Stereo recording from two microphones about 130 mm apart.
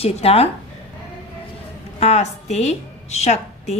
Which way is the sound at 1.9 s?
60° left (ahead or behind).